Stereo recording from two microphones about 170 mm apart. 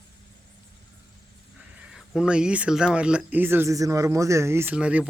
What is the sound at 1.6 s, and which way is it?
Speech, 5° right (ahead or behind).